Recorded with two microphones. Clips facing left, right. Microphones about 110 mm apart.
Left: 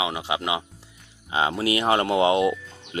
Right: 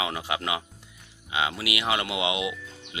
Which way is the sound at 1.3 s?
35° left (ahead or behind).